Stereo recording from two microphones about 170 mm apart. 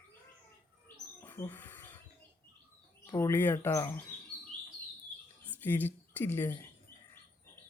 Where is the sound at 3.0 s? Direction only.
20° left (ahead or behind).